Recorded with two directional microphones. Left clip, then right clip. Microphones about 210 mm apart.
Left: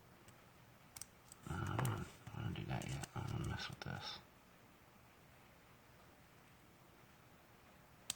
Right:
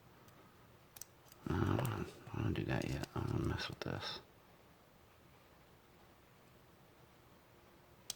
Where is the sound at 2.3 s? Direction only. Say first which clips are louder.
Right 8 dB; 45° right (ahead or behind).